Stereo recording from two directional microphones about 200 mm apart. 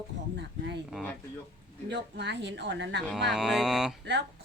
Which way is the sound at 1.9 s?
60° right (ahead or behind).